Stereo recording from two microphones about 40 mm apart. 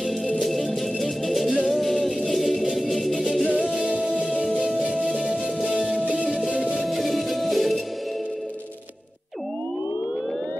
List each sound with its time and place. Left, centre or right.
0.4 s music: centre
3.8 s music: right
6.8 s music: centre